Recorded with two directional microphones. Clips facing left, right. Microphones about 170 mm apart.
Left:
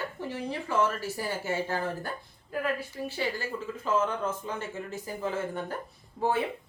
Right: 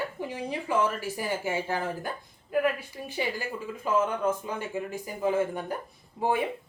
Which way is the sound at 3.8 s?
15° right (ahead or behind).